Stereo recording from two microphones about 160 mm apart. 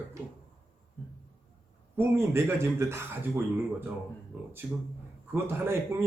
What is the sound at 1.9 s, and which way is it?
Speech, 15° right (ahead or behind).